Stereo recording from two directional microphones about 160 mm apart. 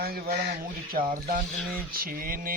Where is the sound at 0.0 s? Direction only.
70° right (ahead or behind).